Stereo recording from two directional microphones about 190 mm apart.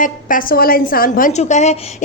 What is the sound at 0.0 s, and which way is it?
A woman's voice, 45° left (ahead or behind).